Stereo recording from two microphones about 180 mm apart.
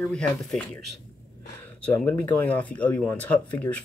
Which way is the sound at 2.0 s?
10° left (ahead or behind).